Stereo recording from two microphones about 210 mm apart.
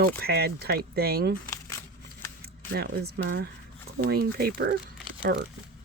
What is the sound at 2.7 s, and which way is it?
Speech, 50° right (ahead or behind).